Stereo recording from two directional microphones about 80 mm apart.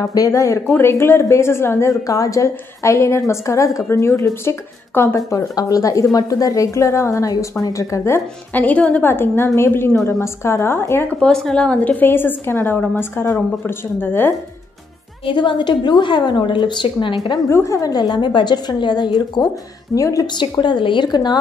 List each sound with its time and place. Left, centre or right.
0.0 s a woman's voice: left
0.7 s a woman's voice: left
5.6 s a woman's voice: left
8.5 s a woman's voice: centre
9.0 s a woman's voice: left
11.1 s a woman's voice: centre; by 14.3 s left
15.2 s a woman's voice: left
17.5 s a woman's voice: left
19.4 s a woman's voice: left
20.3 s a woman's voice: left